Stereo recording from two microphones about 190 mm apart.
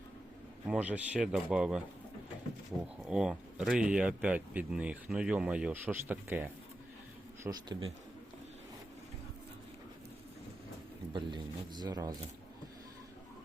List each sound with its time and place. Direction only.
0.7 s speech: 5° right (ahead or behind)
2.8 s speech: 5° right (ahead or behind)
7.4 s speech: 25° right (ahead or behind)
11.1 s speech: 25° right (ahead or behind)